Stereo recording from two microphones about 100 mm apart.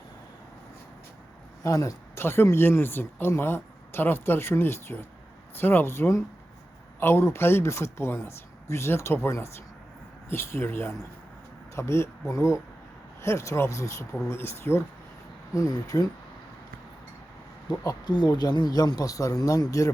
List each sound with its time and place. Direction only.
1.6 s speech: 35° left (ahead or behind)
15.5 s speech: 35° left (ahead or behind)
17.8 s speech: 45° left (ahead or behind)